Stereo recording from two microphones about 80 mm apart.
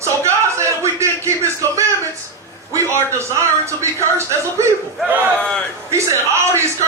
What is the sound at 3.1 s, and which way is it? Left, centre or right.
A man's voice, right.